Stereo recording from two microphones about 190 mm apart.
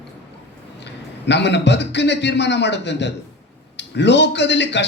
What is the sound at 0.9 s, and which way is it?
A man's voice, 65° left (ahead or behind).